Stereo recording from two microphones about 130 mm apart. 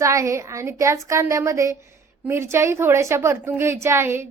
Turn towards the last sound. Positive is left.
turn(degrees=-20)  # may be behind; listen again after turning